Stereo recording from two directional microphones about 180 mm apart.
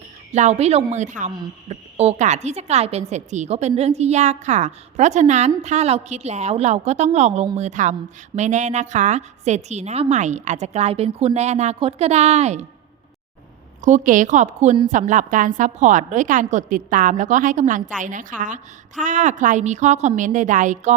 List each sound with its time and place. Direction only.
0.3 s a woman's voice: 40° right (ahead or behind)
13.8 s a woman's voice: 45° right (ahead or behind)